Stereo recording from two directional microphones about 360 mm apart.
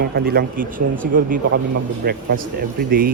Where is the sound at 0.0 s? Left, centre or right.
Right.